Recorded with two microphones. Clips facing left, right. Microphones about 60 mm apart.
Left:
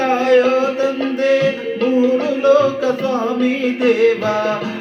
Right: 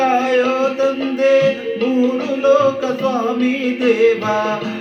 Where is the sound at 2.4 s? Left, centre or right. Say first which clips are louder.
Even; right.